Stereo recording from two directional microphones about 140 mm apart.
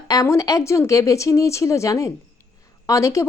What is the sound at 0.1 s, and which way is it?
Speech, 25° left (ahead or behind).